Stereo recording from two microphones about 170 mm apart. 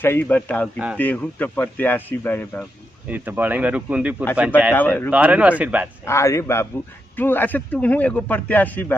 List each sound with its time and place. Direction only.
0.0 s a man's voice: 10° left (ahead or behind)
3.1 s speech: 10° right (ahead or behind)
4.7 s a man's voice: 10° left (ahead or behind)
5.1 s speech: 10° right (ahead or behind)
6.0 s a man's voice: 15° left (ahead or behind)